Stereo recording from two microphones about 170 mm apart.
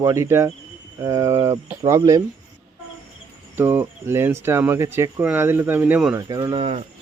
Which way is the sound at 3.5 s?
10° right (ahead or behind).